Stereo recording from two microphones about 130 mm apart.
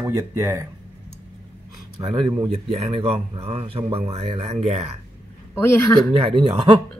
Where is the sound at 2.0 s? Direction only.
45° right (ahead or behind).